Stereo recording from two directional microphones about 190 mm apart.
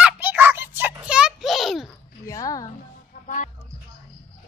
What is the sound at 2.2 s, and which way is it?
Music, 20° left (ahead or behind).